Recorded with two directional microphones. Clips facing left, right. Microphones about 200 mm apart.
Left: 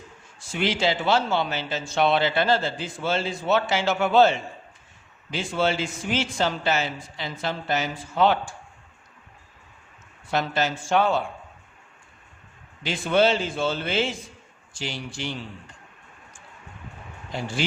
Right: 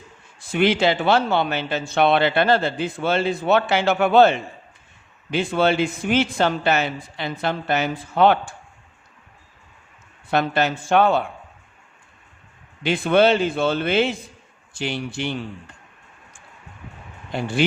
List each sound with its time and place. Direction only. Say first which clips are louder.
0.3 s speech: right 7 dB; 60° right (ahead or behind)
10.2 s speech: right 4 dB; 60° right (ahead or behind)
12.8 s speech: right 4 dB; 60° right (ahead or behind)
17.3 s speech: right 5 dB; 60° right (ahead or behind)